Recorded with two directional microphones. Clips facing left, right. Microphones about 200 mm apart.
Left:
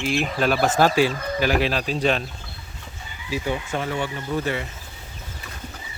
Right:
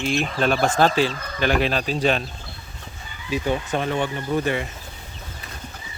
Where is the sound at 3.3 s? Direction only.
20° right (ahead or behind).